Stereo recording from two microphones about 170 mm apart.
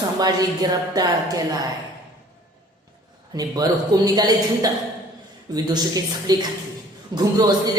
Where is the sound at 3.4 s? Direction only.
20° right (ahead or behind).